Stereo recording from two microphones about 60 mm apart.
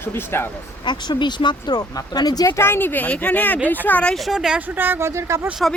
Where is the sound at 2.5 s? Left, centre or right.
Left.